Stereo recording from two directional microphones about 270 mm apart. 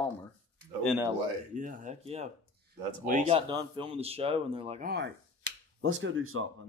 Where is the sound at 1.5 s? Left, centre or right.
Right.